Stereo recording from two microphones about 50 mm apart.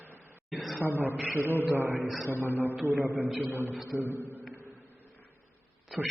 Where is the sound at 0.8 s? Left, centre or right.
Right.